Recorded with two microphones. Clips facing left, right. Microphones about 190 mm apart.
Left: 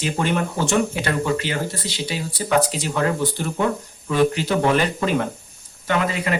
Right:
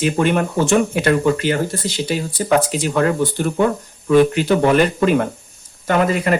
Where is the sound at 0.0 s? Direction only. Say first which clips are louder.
Right 5 dB; 55° right (ahead or behind).